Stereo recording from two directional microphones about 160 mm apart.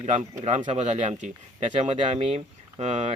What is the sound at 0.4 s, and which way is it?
A man's voice, 45° right (ahead or behind).